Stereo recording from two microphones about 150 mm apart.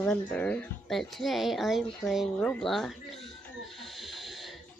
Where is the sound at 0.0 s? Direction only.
10° left (ahead or behind).